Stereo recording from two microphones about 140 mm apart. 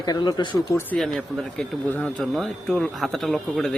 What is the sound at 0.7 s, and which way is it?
Speech, 15° left (ahead or behind).